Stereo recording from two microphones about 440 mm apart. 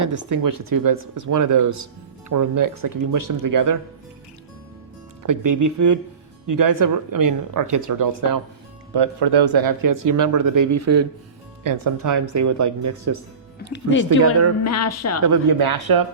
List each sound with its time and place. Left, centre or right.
0.3 s speech: right
5.2 s speech: right
8.9 s speech: right
11.6 s speech: right
13.7 s speech: left
15.3 s speech: right